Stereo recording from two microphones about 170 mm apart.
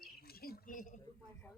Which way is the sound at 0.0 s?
65° left (ahead or behind).